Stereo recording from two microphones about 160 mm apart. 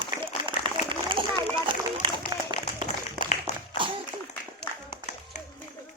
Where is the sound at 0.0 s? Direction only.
30° right (ahead or behind).